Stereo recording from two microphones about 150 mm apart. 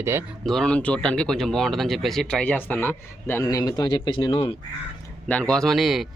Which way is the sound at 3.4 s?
25° left (ahead or behind).